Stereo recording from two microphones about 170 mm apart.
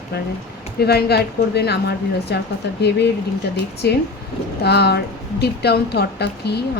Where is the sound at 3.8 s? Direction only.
75° left (ahead or behind).